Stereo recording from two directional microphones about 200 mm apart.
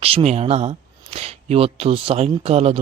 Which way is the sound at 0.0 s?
30° right (ahead or behind).